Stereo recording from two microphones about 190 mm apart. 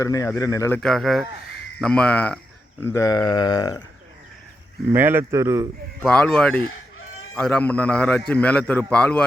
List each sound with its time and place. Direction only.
0.0 s a man's voice: 15° left (ahead or behind)
0.8 s speech: centre (ahead or behind); by 3.8 s 20° left (ahead or behind)
4.9 s speech: 10° right (ahead or behind)
6.0 s a man's voice: 5° left (ahead or behind)